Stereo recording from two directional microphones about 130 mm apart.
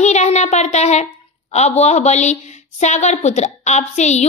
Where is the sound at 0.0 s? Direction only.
60° left (ahead or behind).